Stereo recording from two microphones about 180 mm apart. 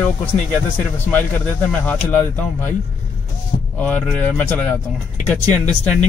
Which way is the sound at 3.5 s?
40° left (ahead or behind).